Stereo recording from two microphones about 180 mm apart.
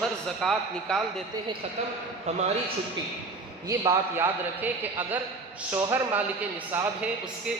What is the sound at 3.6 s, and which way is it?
Speech, 20° right (ahead or behind).